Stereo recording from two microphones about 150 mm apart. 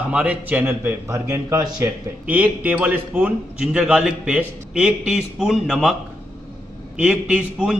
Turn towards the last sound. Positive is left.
turn(degrees=-5)  # may be behind; listen again after turning